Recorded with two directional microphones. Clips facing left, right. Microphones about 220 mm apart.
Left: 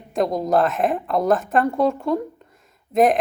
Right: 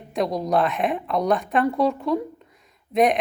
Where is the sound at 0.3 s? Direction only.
Centre (ahead or behind).